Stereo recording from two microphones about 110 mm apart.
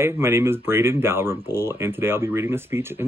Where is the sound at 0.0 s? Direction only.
25° right (ahead or behind).